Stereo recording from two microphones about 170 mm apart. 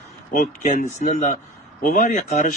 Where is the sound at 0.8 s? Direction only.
45° left (ahead or behind).